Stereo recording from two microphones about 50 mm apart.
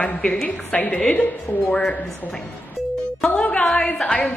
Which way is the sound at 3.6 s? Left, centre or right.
Centre.